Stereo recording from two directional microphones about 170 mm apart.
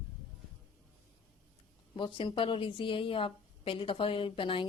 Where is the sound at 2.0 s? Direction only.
30° left (ahead or behind).